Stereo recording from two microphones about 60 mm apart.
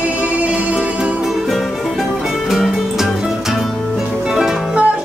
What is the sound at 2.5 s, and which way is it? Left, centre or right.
Music, centre.